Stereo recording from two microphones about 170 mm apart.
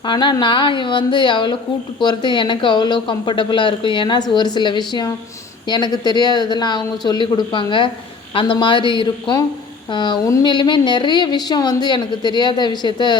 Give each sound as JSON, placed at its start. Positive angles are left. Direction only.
{"t": 0.1, "sound": "speech", "side_deg": 25}